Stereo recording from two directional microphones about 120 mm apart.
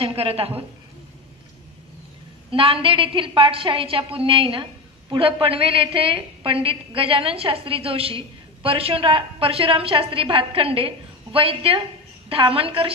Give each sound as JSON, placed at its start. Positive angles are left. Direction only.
{"t": 0.0, "sound": "a woman's voice", "side_deg": -55}
{"t": 2.5, "sound": "a woman's voice", "side_deg": -50}